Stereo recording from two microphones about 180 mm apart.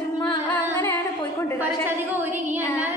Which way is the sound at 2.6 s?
10° right (ahead or behind).